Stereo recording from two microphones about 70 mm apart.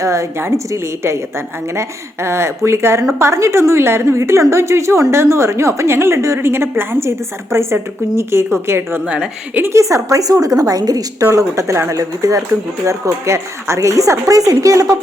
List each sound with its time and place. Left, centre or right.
0.0 s a woman's voice: right
9.0 s a woman's voice: centre
9.6 s a woman's voice: right
11.3 s a woman's voice: right